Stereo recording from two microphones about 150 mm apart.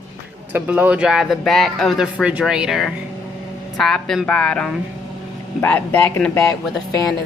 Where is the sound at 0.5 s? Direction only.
10° right (ahead or behind); by 6.4 s 10° left (ahead or behind).